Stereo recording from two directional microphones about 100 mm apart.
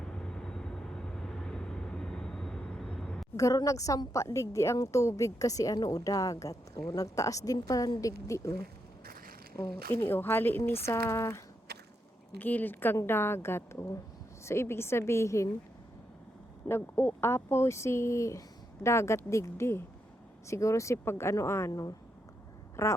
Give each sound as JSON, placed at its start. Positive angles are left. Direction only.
{"t": 0.0, "sound": "vehicle", "side_deg": 5}
{"t": 3.3, "sound": "a woman's voice", "side_deg": 35}
{"t": 10.1, "sound": "speech", "side_deg": 20}
{"t": 12.4, "sound": "speech", "side_deg": 20}
{"t": 16.6, "sound": "speech", "side_deg": 25}
{"t": 21.7, "sound": "a woman's voice", "side_deg": 40}
{"t": 22.8, "sound": "speech", "side_deg": 30}